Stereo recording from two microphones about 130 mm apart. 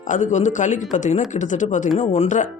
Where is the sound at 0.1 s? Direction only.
70° left (ahead or behind).